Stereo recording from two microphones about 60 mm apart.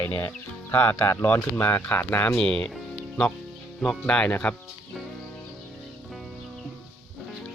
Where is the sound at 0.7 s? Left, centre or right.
Left.